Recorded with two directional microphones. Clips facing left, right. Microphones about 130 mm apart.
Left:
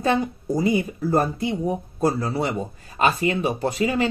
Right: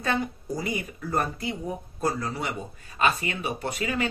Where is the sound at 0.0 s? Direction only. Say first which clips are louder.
Left 6 dB; 25° left (ahead or behind).